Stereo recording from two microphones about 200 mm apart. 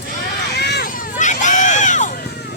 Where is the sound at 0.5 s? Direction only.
55° left (ahead or behind); by 2.1 s 40° left (ahead or behind).